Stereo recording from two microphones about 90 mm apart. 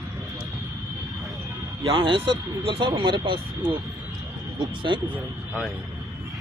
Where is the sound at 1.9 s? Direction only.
70° right (ahead or behind).